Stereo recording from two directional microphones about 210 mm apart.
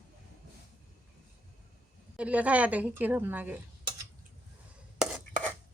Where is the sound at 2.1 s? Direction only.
5° right (ahead or behind).